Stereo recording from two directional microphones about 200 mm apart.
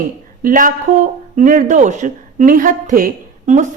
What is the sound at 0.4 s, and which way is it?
A woman's voice, 40° right (ahead or behind).